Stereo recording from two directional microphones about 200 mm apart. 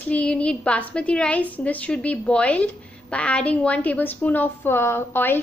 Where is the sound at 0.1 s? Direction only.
5° left (ahead or behind).